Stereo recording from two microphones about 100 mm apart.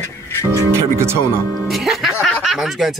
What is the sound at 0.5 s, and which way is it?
Speech, 25° right (ahead or behind).